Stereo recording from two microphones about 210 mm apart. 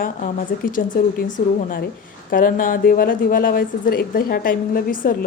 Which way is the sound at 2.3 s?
40° left (ahead or behind).